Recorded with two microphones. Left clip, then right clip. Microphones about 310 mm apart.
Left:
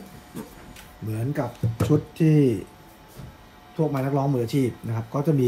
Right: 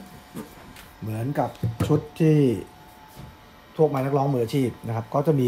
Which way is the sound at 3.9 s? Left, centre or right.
Right.